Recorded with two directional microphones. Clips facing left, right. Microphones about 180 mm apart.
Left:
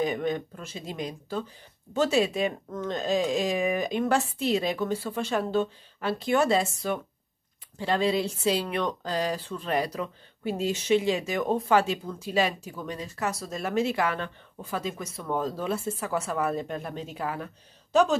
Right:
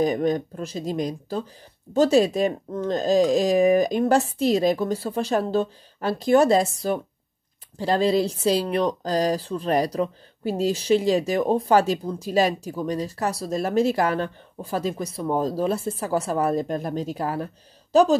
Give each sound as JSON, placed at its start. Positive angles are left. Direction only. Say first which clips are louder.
{"t": 0.0, "sound": "speech", "louder": "right 6 dB", "side_deg": -40}